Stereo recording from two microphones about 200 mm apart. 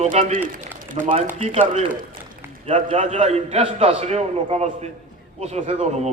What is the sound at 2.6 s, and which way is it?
A man's voice, 30° right (ahead or behind).